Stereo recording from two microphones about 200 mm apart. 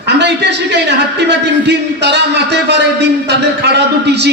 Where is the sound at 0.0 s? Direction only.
60° right (ahead or behind).